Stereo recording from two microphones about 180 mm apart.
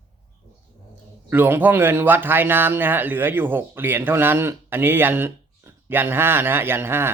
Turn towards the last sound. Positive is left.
turn(degrees=-10)  # may be behind; listen again after turning